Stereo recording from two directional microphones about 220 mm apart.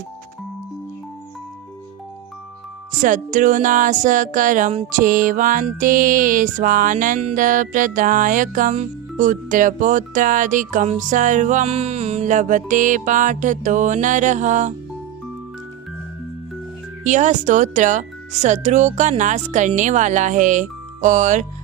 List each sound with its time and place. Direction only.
3.0 s music: 35° right (ahead or behind)
17.0 s music: 35° right (ahead or behind)